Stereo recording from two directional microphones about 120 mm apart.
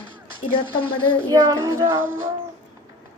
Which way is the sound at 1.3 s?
30° right (ahead or behind).